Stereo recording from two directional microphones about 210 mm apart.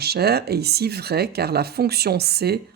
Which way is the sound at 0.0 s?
50° right (ahead or behind).